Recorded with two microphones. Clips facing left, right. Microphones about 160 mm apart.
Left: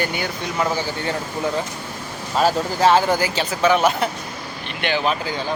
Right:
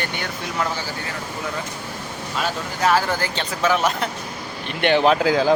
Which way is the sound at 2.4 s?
30° left (ahead or behind).